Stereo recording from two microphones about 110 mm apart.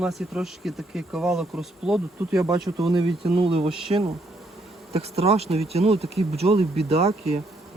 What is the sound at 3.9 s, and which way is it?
Speech, 40° right (ahead or behind).